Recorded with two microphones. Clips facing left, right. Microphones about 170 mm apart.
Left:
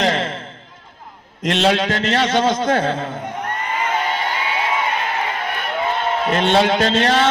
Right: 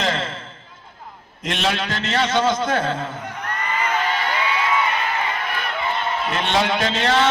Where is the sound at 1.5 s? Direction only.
65° left (ahead or behind).